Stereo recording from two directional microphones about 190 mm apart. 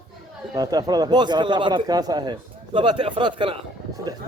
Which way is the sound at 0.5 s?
20° right (ahead or behind).